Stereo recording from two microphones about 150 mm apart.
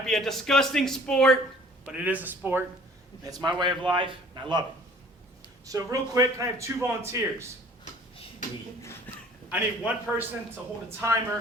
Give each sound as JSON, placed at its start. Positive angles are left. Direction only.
{"t": 0.0, "sound": "speech", "side_deg": 0}
{"t": 1.9, "sound": "a man's voice", "side_deg": -10}
{"t": 3.2, "sound": "a man's voice", "side_deg": -25}
{"t": 5.6, "sound": "a man's voice", "side_deg": -25}
{"t": 8.8, "sound": "speech", "side_deg": 15}
{"t": 9.5, "sound": "a man's voice", "side_deg": -10}